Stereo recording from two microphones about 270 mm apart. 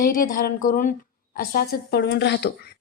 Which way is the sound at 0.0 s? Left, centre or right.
Left.